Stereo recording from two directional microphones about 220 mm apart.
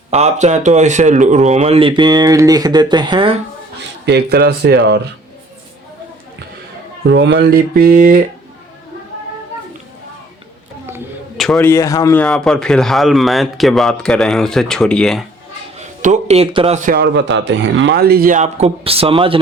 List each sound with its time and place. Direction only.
0.1 s speech: 30° right (ahead or behind)
3.8 s speech: 50° right (ahead or behind)
7.1 s speech: 50° right (ahead or behind)
11.3 s speech: centre (ahead or behind)
15.8 s speech: 35° right (ahead or behind)